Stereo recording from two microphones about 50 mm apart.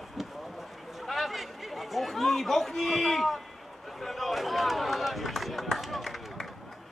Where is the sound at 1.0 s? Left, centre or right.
Centre.